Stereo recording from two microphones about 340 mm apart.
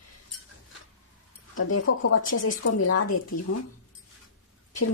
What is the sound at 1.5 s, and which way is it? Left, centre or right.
Speech, left.